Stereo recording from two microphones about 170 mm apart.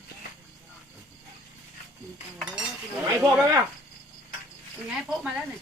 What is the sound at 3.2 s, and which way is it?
Speech, 15° right (ahead or behind).